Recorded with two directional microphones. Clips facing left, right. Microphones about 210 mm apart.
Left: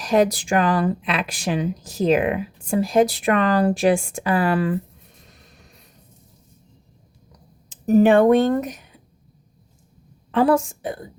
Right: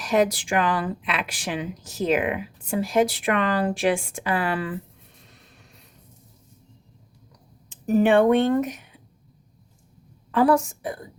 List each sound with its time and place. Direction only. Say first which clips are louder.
0.0 s speech: left 3 dB; 35° left (ahead or behind)
7.7 s speech: left 4 dB; 40° left (ahead or behind)
10.3 s a woman's voice: left 2 dB; 25° left (ahead or behind)